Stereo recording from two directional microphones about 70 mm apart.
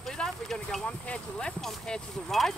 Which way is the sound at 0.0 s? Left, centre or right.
Centre.